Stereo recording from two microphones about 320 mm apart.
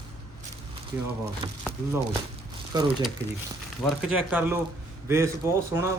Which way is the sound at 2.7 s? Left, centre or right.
Centre.